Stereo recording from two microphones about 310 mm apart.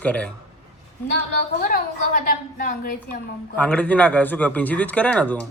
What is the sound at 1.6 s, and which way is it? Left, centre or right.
A woman's voice, left.